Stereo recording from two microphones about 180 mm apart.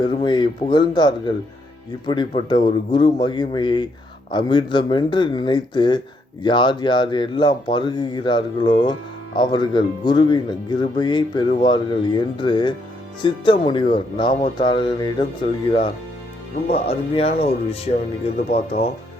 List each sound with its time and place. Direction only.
0.0 s speech: 25° left (ahead or behind)